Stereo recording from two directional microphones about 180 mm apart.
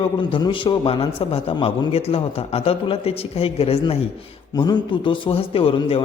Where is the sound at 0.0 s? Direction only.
30° left (ahead or behind).